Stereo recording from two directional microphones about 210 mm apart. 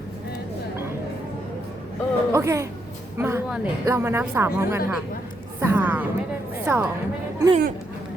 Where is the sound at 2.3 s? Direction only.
15° right (ahead or behind).